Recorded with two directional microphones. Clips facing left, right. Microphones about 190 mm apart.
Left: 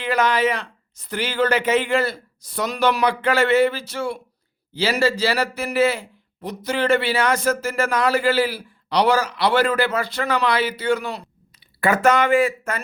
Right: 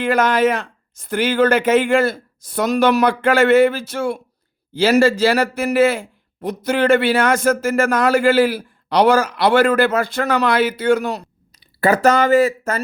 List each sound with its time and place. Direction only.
0.0 s a man's voice: 50° right (ahead or behind)